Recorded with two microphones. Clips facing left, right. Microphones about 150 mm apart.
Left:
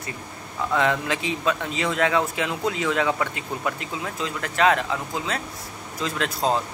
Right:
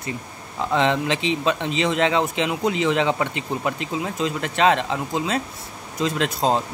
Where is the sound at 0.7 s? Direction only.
25° right (ahead or behind).